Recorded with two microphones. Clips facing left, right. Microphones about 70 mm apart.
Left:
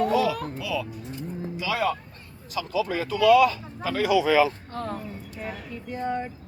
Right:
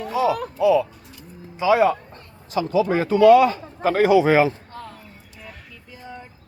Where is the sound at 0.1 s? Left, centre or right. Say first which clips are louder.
Right 2 dB; right.